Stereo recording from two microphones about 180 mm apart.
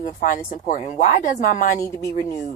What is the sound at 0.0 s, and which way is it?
Speech, 45° left (ahead or behind).